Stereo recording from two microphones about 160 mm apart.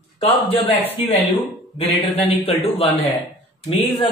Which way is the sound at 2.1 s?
40° left (ahead or behind).